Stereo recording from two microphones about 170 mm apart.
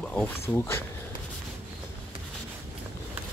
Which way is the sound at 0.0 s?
5° left (ahead or behind).